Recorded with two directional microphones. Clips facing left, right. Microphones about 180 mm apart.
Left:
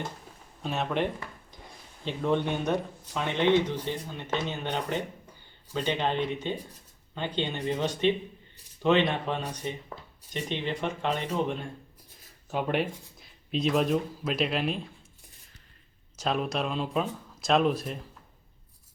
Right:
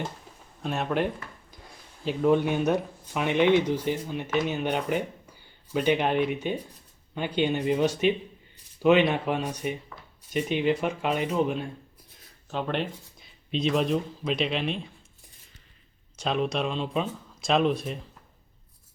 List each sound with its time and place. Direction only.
0.6 s speech: centre (ahead or behind)
2.0 s speech: 5° right (ahead or behind)
12.5 s speech: 10° left (ahead or behind)
16.1 s speech: centre (ahead or behind)